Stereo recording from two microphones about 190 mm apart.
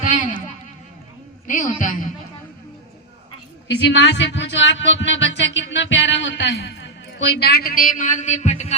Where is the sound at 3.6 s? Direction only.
70° left (ahead or behind).